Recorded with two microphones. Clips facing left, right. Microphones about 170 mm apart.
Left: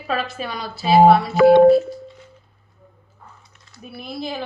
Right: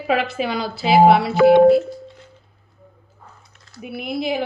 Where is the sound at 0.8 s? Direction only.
75° right (ahead or behind).